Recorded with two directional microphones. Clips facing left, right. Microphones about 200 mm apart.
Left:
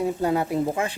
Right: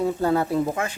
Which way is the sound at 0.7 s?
30° left (ahead or behind).